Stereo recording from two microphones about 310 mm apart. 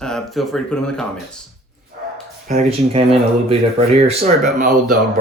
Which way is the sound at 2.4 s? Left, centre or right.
Right.